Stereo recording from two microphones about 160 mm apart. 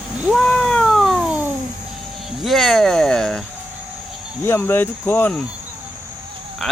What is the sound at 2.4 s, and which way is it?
Speech, centre (ahead or behind).